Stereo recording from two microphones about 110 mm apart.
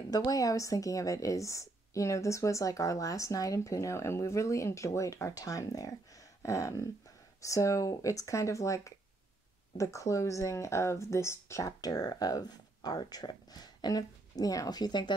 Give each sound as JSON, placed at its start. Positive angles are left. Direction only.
{"t": 0.1, "sound": "speech", "side_deg": 35}